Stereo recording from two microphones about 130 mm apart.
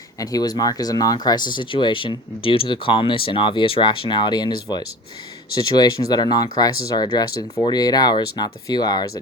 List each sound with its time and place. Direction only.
0.2 s speech: 30° left (ahead or behind)